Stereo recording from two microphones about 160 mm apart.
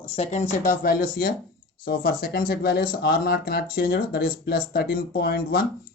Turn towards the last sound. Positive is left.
turn(degrees=70)  # may be behind; listen again after turning